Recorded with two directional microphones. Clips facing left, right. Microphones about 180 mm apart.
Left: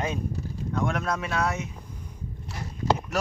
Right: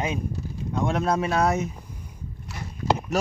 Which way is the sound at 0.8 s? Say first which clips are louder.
Right 5 dB; 25° right (ahead or behind).